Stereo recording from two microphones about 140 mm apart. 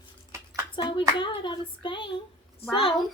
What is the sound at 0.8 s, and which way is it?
A woman's voice, 35° left (ahead or behind).